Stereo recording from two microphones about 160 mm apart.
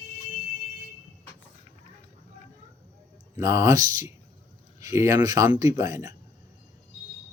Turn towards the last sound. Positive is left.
turn(degrees=-20)  # may be behind; listen again after turning